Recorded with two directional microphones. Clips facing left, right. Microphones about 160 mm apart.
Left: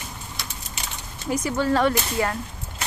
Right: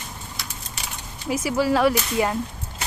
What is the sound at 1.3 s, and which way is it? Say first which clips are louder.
Speech: right 1 dB; 5° right (ahead or behind).